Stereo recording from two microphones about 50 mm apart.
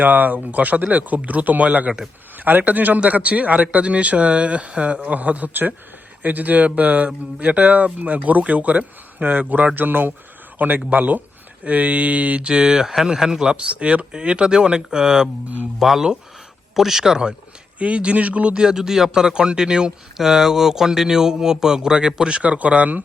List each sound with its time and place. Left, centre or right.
0.0 s speech: right; by 15.3 s centre
15.8 s a man's voice: centre
17.7 s speech: right
18.6 s a man's voice: centre; by 23.0 s right